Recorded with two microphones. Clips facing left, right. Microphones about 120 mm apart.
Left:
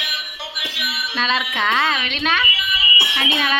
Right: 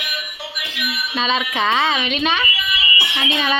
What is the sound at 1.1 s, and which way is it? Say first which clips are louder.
A woman's voice: right 1 dB; centre (ahead or behind).